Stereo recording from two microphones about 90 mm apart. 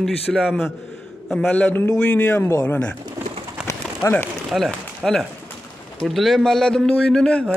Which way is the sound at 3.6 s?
10° right (ahead or behind).